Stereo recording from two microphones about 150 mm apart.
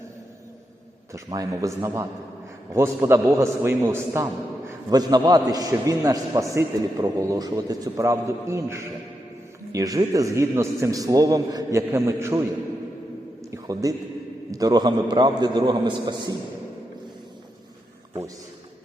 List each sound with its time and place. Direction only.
1.3 s a man's voice: 20° right (ahead or behind)
13.5 s a sound: 25° right (ahead or behind)
14.5 s a man's voice: 25° right (ahead or behind)